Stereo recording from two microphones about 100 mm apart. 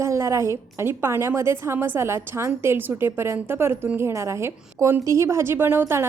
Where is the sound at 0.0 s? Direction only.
30° right (ahead or behind).